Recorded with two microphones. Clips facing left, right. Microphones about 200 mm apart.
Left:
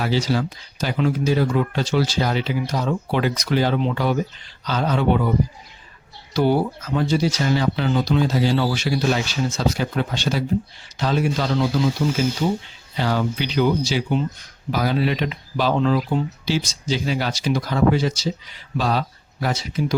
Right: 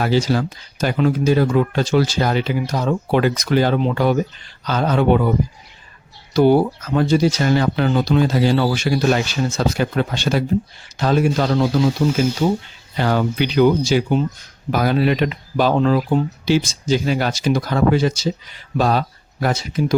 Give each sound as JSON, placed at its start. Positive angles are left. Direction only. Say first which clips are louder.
{"t": 0.0, "sound": "speech", "louder": "right 3 dB", "side_deg": -50}
{"t": 6.3, "sound": "speech", "louder": "right 5 dB", "side_deg": -50}
{"t": 13.0, "sound": "speech", "louder": "right 4 dB", "side_deg": -55}